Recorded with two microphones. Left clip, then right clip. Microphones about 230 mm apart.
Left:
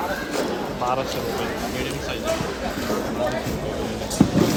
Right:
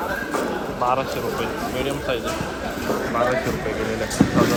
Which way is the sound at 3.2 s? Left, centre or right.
Centre.